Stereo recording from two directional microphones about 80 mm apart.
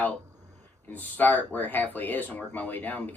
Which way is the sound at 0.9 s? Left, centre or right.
Left.